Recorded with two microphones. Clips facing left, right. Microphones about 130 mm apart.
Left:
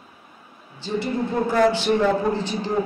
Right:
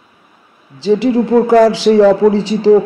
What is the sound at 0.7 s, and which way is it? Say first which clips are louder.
Speech: right 13 dB; 90° right.